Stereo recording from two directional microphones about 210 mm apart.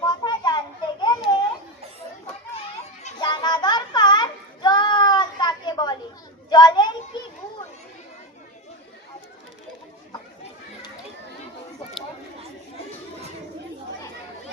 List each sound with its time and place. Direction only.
0.1 s a sound: 20° left (ahead or behind)
3.2 s child singing: 20° left (ahead or behind)
6.5 s children playing: 20° left (ahead or behind)